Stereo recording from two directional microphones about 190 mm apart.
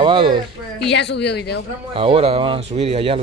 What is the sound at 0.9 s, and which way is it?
Speech, 65° left (ahead or behind).